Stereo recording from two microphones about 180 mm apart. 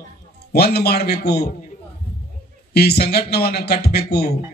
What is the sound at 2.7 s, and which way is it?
A man's voice, 65° left (ahead or behind).